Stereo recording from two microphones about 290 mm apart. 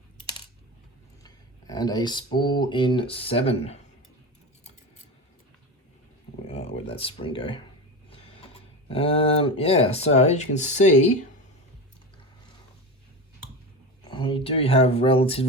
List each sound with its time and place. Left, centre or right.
1.2 s speech: centre
6.5 s a sound: left
8.9 s speech: centre
14.0 s speech: centre